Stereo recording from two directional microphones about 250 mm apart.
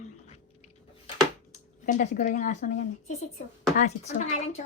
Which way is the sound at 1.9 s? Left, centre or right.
Left.